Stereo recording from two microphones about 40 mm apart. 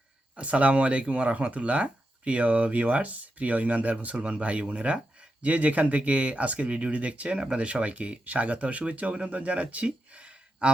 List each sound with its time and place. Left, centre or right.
0.3 s speech: right